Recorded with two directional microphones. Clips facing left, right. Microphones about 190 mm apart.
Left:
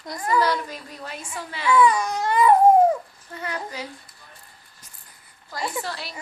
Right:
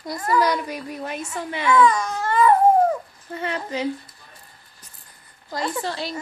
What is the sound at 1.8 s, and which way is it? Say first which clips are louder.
Baby cry: even; 10° left (ahead or behind).